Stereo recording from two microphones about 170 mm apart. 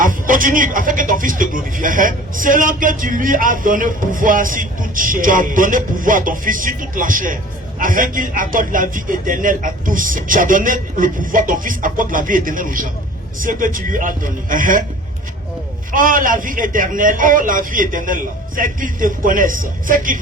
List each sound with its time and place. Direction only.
0.0 s speech: 55° right (ahead or behind)
15.9 s speech: 55° right (ahead or behind)